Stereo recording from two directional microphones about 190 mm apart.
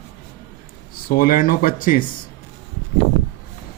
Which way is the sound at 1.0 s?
50° left (ahead or behind).